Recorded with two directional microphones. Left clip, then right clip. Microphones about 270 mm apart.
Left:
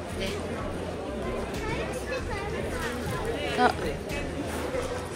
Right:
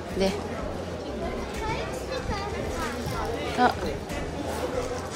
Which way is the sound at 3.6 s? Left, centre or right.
Centre.